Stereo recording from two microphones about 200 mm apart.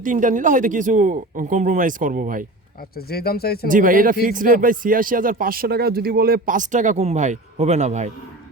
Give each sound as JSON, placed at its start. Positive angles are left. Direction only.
{"t": 0.0, "sound": "speech", "side_deg": -40}
{"t": 3.1, "sound": "speech", "side_deg": 50}
{"t": 3.7, "sound": "speech", "side_deg": -45}